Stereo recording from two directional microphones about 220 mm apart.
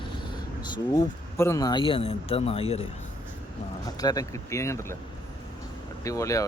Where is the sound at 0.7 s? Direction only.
15° left (ahead or behind).